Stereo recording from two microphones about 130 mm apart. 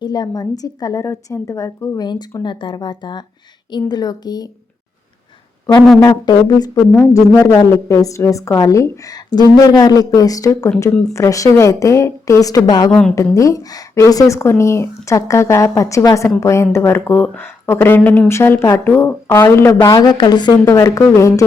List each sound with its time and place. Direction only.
0.0 s a woman's voice: 30° left (ahead or behind)
2.0 s speech: 35° left (ahead or behind)
6.0 s a woman's voice: 30° left (ahead or behind)
6.9 s a woman's voice: 20° left (ahead or behind)
20.7 s a woman's voice: 25° left (ahead or behind)